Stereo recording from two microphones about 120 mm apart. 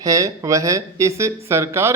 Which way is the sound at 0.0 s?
30° right (ahead or behind).